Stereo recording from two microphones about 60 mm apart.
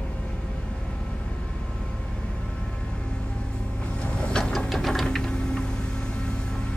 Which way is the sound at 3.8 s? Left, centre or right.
Centre.